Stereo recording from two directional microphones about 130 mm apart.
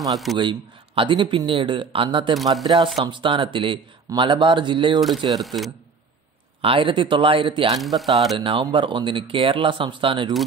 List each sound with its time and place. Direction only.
0.1 s speech: centre (ahead or behind)
0.4 s a man's voice: 40° right (ahead or behind)
6.6 s speech: 40° right (ahead or behind)
7.8 s speech: centre (ahead or behind)
8.4 s a man's voice: 40° right (ahead or behind)